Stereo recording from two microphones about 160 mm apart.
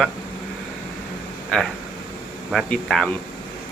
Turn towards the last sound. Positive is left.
turn(degrees=5)  # may be behind; listen again after turning